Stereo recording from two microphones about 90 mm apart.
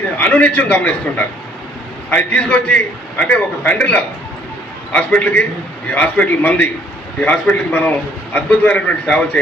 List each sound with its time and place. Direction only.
0.2 s a man's voice: 15° left (ahead or behind)